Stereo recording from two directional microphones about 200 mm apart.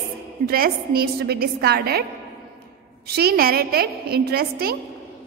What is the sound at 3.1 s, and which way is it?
A woman's voice, 50° right (ahead or behind).